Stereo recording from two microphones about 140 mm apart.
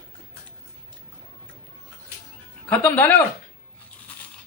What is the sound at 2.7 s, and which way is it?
Speech, 10° left (ahead or behind).